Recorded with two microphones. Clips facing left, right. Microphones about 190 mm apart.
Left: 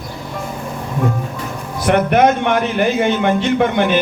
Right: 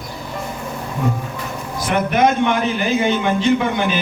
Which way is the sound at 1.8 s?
60° left (ahead or behind).